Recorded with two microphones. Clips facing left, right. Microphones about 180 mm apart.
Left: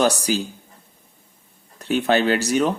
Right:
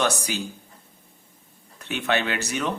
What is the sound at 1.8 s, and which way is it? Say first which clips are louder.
Speech: left 7 dB; 35° left (ahead or behind).